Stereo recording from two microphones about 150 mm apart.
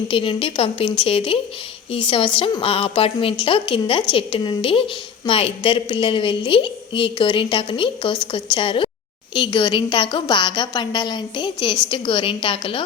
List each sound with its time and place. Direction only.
0.1 s a woman's voice: 35° left (ahead or behind)